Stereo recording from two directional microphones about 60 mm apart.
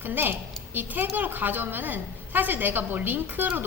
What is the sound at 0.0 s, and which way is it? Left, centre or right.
A woman's voice, right.